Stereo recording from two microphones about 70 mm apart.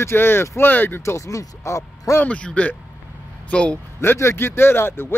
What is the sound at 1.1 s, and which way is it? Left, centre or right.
A man's voice, left.